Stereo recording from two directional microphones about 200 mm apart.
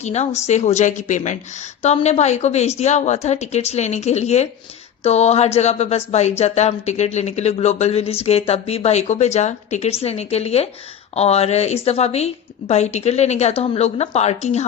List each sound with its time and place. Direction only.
0.0 s speech: 35° left (ahead or behind)